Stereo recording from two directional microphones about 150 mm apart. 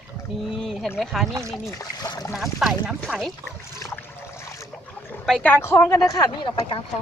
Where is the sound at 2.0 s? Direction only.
25° left (ahead or behind).